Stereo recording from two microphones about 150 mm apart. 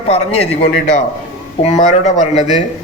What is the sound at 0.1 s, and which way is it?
Mantra, 45° left (ahead or behind).